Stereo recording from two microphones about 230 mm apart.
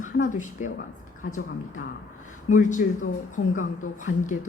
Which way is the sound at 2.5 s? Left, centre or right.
Left.